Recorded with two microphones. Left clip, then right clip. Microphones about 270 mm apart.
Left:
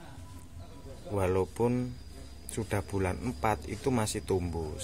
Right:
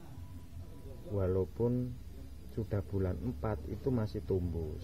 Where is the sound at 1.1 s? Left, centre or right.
Centre.